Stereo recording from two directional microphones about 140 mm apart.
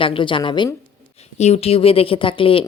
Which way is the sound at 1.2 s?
50° left (ahead or behind).